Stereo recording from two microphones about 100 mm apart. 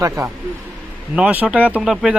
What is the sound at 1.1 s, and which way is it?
Speech, 15° right (ahead or behind).